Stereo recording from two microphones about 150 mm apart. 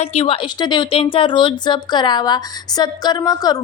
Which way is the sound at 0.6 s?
30° left (ahead or behind).